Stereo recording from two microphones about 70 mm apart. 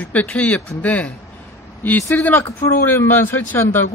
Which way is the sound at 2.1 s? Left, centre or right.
Left.